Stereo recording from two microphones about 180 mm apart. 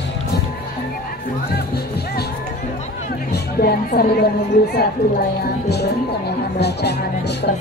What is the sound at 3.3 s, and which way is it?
Music, 60° left (ahead or behind).